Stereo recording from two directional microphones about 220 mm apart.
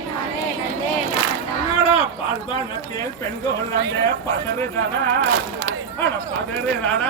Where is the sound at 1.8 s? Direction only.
25° left (ahead or behind).